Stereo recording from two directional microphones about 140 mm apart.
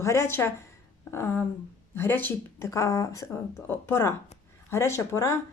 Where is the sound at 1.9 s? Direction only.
15° left (ahead or behind).